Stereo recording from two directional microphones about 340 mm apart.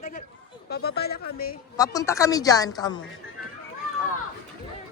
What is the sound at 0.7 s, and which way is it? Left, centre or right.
Speech, left.